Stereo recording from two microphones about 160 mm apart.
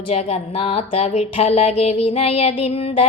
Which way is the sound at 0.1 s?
40° left (ahead or behind).